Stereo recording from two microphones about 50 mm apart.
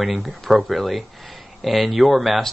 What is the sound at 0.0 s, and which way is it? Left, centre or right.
Speech, centre.